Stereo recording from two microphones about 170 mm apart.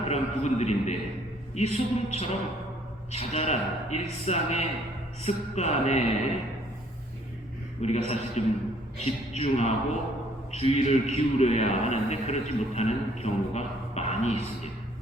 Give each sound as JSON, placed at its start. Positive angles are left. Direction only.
{"t": 0.1, "sound": "a man's voice", "side_deg": 40}
{"t": 7.8, "sound": "a man's voice", "side_deg": 40}